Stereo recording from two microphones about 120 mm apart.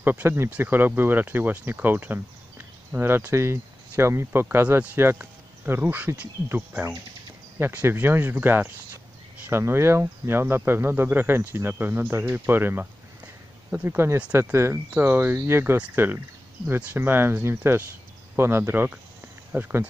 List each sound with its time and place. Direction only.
0.0 s speech: 15° right (ahead or behind)